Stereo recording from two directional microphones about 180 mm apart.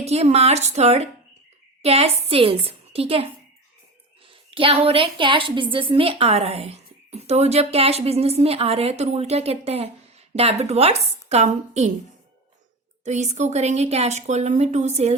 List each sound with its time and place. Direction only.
0.0 s a woman's voice: 35° right (ahead or behind)
4.3 s a woman's voice: 30° right (ahead or behind)
13.1 s a woman's voice: 40° right (ahead or behind)